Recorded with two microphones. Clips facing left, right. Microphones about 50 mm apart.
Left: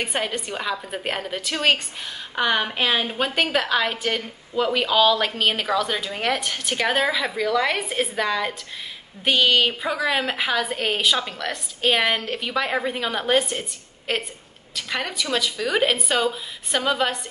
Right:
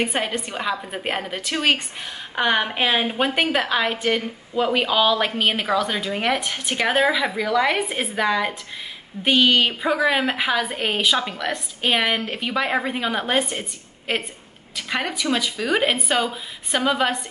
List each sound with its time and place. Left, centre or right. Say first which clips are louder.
0.0 s a woman's voice: right 2 dB; centre